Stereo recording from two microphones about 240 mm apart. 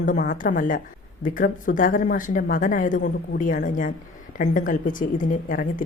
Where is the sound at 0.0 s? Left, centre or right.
Left.